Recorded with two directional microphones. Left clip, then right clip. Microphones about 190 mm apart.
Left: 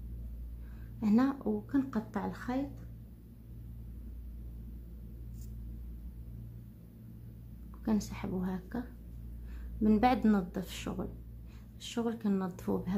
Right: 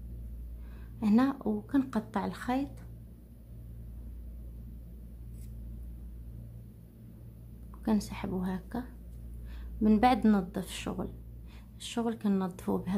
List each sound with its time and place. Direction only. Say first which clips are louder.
0.9 s speech: right 2 dB; 15° right (ahead or behind)
7.8 s speech: right 3 dB; 15° right (ahead or behind)